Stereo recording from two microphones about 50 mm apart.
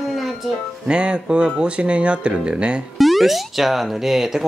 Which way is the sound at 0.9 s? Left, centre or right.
Right.